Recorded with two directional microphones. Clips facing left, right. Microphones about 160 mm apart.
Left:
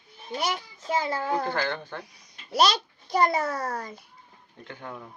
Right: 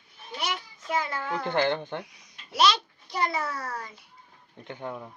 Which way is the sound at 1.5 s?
20° right (ahead or behind).